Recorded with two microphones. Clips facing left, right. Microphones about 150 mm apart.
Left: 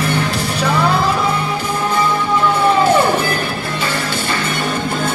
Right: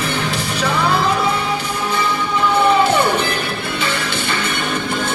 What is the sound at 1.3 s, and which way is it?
Music, 50° left (ahead or behind).